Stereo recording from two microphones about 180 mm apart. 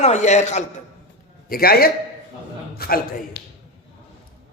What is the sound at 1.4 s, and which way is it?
A man's voice, 55° left (ahead or behind).